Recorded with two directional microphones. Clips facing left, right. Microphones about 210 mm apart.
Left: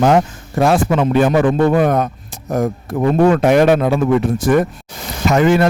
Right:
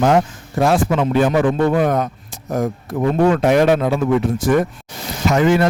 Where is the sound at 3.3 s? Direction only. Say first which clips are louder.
Left 2 dB; 55° left (ahead or behind).